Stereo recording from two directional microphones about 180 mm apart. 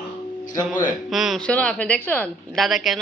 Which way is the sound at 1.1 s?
Centre (ahead or behind).